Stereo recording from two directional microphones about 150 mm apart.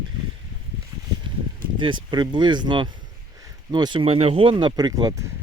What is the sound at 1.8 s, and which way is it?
Speech, 30° right (ahead or behind).